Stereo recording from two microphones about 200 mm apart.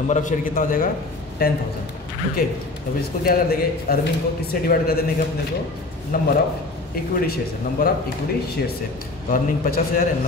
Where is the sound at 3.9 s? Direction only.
50° left (ahead or behind).